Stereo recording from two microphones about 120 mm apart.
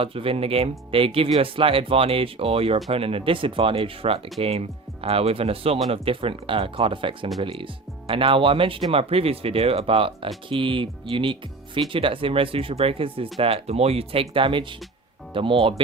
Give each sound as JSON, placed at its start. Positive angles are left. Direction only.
{"t": 0.0, "sound": "speech", "side_deg": -50}